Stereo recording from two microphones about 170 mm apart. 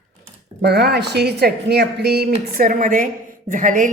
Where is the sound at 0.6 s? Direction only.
70° right (ahead or behind).